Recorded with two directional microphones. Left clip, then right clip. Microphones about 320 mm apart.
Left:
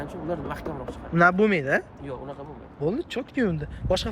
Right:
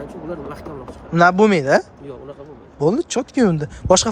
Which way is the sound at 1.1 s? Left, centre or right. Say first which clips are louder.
Right 6 dB; centre.